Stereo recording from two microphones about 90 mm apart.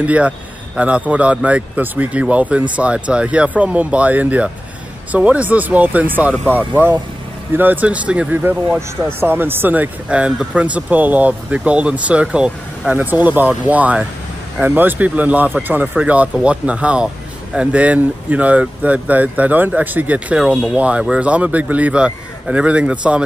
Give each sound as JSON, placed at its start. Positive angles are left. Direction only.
{"t": 0.0, "sound": "speech", "side_deg": -15}